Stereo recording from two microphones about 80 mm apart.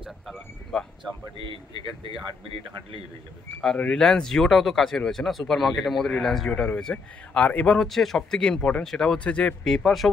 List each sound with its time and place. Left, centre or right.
1.4 s speech: right
3.6 s speech: centre
6.5 s a man's voice: centre